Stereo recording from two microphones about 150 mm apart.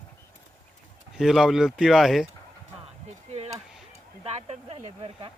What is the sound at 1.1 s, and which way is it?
Speech, 5° right (ahead or behind).